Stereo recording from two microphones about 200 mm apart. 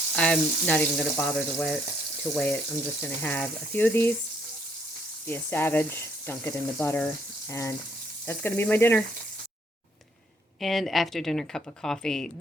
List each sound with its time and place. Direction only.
0.2 s speech: 5° left (ahead or behind)
5.2 s speech: 10° left (ahead or behind)
10.6 s a woman's voice: centre (ahead or behind)